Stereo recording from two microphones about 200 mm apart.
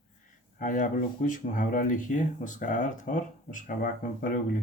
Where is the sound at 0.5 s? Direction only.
40° left (ahead or behind).